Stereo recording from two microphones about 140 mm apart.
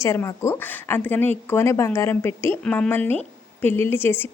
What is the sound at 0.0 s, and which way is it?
A woman's voice, 20° left (ahead or behind).